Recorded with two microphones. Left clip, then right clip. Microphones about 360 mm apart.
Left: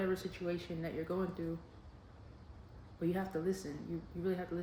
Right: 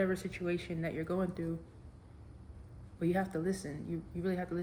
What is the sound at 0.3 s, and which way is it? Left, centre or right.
Speech, right.